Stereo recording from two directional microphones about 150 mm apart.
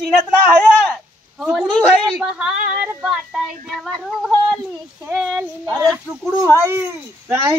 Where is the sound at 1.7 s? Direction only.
5° left (ahead or behind).